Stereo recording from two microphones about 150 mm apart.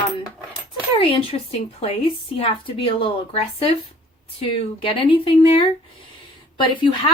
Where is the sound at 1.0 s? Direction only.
40° left (ahead or behind).